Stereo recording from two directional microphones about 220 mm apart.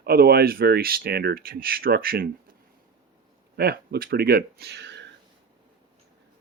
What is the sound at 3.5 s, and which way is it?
Speech, 45° right (ahead or behind).